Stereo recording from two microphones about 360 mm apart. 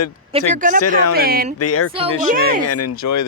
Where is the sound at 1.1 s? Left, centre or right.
Right.